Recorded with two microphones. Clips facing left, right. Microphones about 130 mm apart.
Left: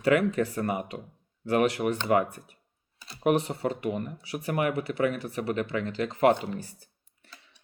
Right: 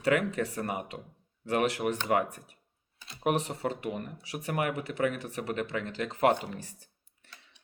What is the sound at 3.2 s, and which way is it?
Speech, 35° right (ahead or behind).